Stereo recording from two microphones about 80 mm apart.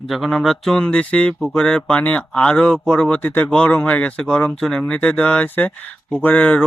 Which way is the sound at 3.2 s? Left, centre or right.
Left.